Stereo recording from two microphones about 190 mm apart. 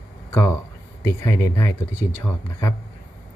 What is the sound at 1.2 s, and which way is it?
Speech, 15° left (ahead or behind).